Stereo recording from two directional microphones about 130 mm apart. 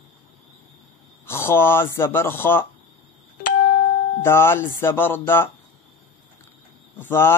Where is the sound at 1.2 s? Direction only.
20° left (ahead or behind).